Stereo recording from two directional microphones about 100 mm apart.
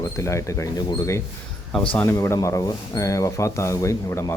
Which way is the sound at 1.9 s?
20° left (ahead or behind).